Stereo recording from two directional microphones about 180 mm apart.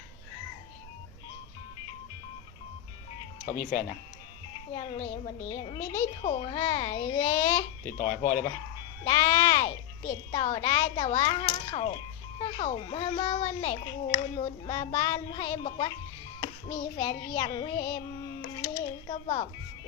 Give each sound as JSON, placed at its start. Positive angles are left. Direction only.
{"t": 3.4, "sound": "speech", "side_deg": 50}
{"t": 4.7, "sound": "speech", "side_deg": 25}
{"t": 7.9, "sound": "speech", "side_deg": 50}
{"t": 9.0, "sound": "speech", "side_deg": 25}
{"t": 18.5, "sound": "a sound", "side_deg": 25}